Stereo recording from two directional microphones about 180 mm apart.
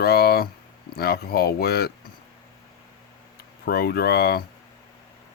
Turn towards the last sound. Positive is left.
turn(degrees=60)  # may be behind; listen again after turning